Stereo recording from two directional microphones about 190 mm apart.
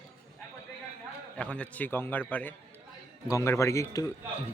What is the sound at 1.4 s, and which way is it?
Speech, 5° left (ahead or behind).